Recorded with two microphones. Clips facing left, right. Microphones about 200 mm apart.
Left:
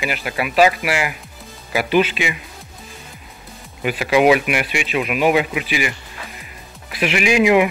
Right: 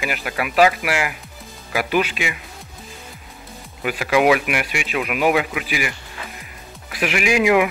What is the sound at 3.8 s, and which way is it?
Speech, 20° left (ahead or behind).